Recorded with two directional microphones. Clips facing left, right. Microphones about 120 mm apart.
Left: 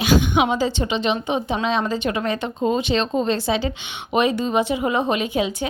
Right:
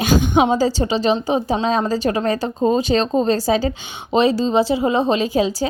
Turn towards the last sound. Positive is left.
turn(degrees=-35)  # may be behind; listen again after turning